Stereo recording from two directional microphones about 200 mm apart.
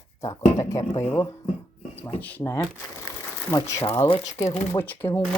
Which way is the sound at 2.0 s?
10° left (ahead or behind).